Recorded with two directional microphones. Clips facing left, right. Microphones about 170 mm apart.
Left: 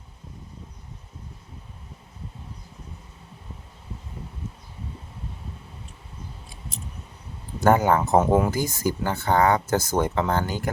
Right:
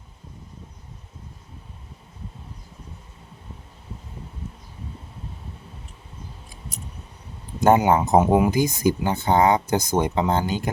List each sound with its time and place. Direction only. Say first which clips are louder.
7.6 s speech: right 2 dB; 20° right (ahead or behind)